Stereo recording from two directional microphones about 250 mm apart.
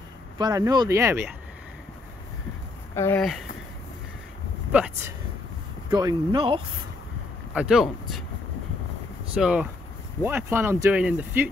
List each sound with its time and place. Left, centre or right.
0.4 s speech: centre
2.9 s speech: centre
4.7 s speech: centre
5.9 s speech: centre
7.5 s speech: centre
9.3 s speech: centre